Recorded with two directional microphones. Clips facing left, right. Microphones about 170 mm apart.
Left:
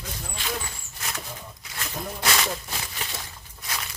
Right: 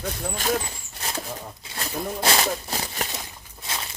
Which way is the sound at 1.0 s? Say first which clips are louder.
Right 4 dB; 30° right (ahead or behind).